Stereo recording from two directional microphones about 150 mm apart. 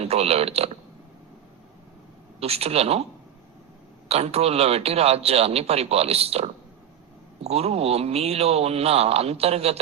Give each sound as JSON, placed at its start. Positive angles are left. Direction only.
{"t": 0.0, "sound": "a man's voice", "side_deg": -45}
{"t": 2.4, "sound": "a man's voice", "side_deg": -40}
{"t": 4.1, "sound": "a man's voice", "side_deg": -45}